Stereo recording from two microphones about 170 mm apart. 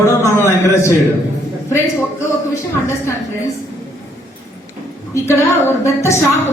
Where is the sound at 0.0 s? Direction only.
15° left (ahead or behind).